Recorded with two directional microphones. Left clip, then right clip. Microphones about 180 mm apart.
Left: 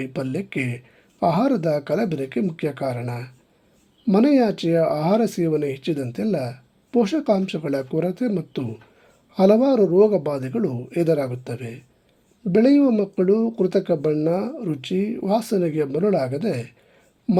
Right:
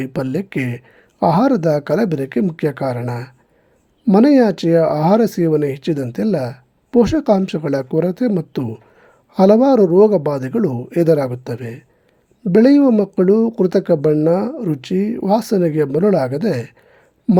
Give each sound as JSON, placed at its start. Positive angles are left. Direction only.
{"t": 0.0, "sound": "speech", "side_deg": -35}